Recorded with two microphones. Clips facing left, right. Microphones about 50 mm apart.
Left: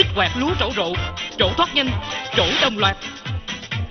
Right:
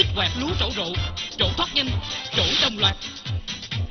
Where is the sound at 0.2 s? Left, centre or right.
Left.